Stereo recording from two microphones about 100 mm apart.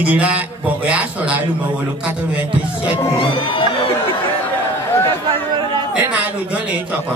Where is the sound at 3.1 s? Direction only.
60° left (ahead or behind).